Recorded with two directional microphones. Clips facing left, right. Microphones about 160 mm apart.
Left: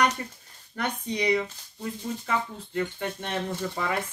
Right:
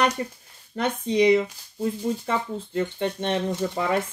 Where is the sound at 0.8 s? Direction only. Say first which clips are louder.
Right 8 dB; 25° right (ahead or behind).